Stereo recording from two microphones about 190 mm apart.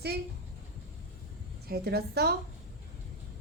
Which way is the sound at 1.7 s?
55° right (ahead or behind).